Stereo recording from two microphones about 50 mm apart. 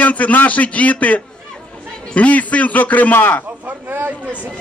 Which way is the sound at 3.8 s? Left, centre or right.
Right.